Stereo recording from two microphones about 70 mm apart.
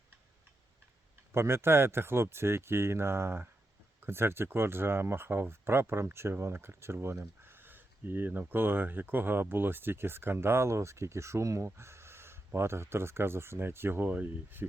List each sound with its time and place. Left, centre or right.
1.3 s speech: right